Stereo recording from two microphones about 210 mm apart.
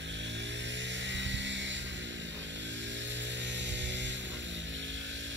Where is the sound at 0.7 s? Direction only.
60° right (ahead or behind).